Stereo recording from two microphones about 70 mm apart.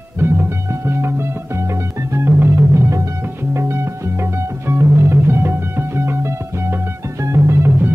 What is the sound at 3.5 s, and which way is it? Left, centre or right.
Music, right.